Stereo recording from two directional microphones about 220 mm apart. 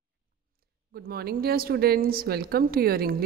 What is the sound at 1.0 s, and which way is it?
A woman's voice, 45° right (ahead or behind).